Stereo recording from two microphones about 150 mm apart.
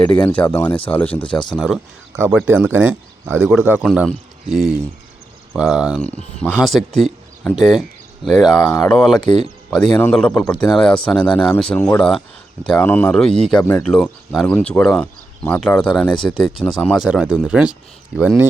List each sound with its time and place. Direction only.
0.0 s speech: 10° left (ahead or behind)
1.5 s speech: centre (ahead or behind)
3.8 s speech: centre (ahead or behind)
9.2 s speech: 45° right (ahead or behind)
9.6 s speech: 5° left (ahead or behind)